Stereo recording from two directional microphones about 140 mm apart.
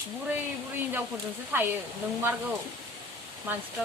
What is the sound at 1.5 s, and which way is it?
Speech, 15° right (ahead or behind).